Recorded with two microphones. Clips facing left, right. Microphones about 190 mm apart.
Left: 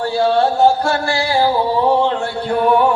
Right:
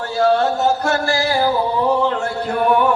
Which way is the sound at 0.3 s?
30° left (ahead or behind).